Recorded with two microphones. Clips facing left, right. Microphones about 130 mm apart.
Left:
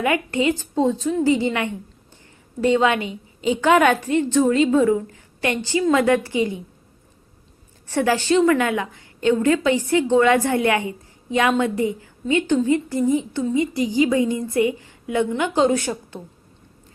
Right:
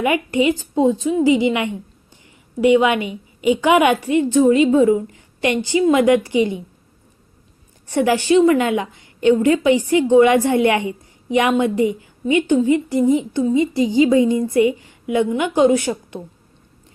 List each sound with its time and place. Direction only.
0.0 s a woman's voice: 15° right (ahead or behind)
7.9 s a woman's voice: 15° right (ahead or behind)